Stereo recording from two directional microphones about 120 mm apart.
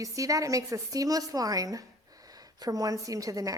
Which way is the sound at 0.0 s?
30° right (ahead or behind).